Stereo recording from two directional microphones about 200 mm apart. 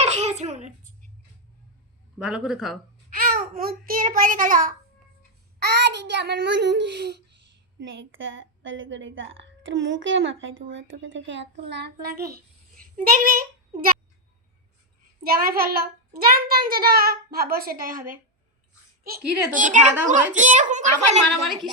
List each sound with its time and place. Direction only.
0.0 s a sound: 35° right (ahead or behind)
2.1 s a man's voice: 5° right (ahead or behind)
3.1 s a child's voice: 45° right (ahead or behind)
5.5 s a child's voice: 55° right (ahead or behind)
7.8 s a woman's voice: 65° right (ahead or behind)
11.7 s a child's voice: 55° right (ahead or behind)
15.2 s a child's voice: 50° right (ahead or behind)